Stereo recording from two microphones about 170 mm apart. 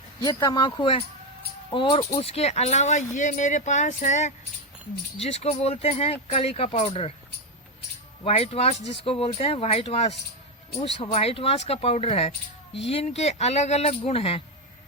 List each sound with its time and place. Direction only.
0.2 s speech: 25° left (ahead or behind)
8.2 s speech: 35° left (ahead or behind)